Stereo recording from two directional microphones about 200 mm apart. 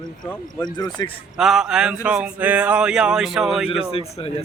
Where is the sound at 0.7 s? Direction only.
20° left (ahead or behind).